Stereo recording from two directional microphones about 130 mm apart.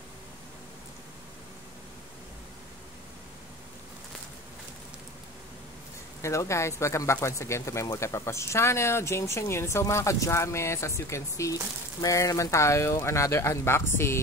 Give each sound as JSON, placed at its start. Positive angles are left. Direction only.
{"t": 6.2, "sound": "speech", "side_deg": 20}